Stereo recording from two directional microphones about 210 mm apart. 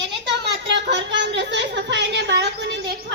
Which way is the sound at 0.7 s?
55° right (ahead or behind).